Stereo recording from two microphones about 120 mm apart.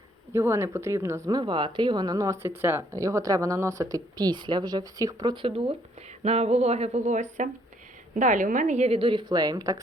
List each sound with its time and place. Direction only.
0.3 s speech: 20° right (ahead or behind)
5.3 s speech: 50° right (ahead or behind)
6.2 s a woman's voice: 65° right (ahead or behind); by 9.8 s 30° right (ahead or behind)